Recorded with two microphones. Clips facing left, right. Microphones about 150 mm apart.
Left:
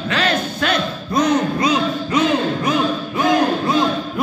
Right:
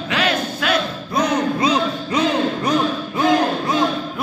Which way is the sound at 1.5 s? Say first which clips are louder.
Left 1 dB; 30° right (ahead or behind).